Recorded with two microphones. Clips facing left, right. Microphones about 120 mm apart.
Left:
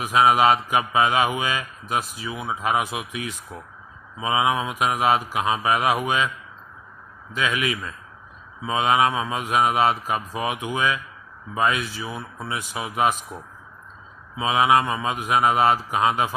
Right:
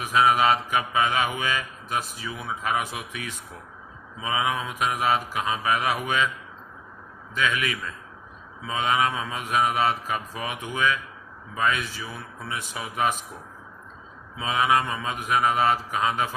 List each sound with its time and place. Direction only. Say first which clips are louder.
0.0 s speech: left 3 dB; 30° left (ahead or behind)
1.4 s mantra: left 2 dB; 30° left (ahead or behind)
2.3 s speech: left 4 dB; 15° left (ahead or behind)
2.6 s mantra: left 4 dB; 25° left (ahead or behind)
4.2 s mantra: left 5 dB; 25° left (ahead or behind)
4.8 s speech: left 2 dB; 30° left (ahead or behind)
7.3 s mantra: left 1 dB; 30° left (ahead or behind)
8.6 s mantra: left 4 dB; 30° left (ahead or behind)
11.5 s speech: left 3 dB; 30° left (ahead or behind)
14.6 s mantra: left 3 dB; 25° left (ahead or behind)
15.3 s speech: left 3 dB; 30° left (ahead or behind)
15.9 s mantra: left 4 dB; 25° left (ahead or behind)